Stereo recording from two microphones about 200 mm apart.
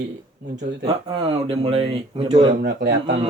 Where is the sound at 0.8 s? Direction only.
25° right (ahead or behind).